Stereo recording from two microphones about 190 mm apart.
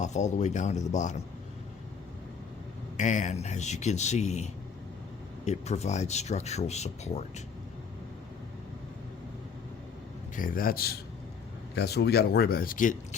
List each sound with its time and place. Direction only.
0.0 s speech: 40° left (ahead or behind)
3.0 s speech: 40° left (ahead or behind)
10.3 s speech: 45° left (ahead or behind)